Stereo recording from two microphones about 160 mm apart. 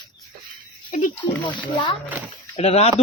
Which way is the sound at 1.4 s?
30° left (ahead or behind).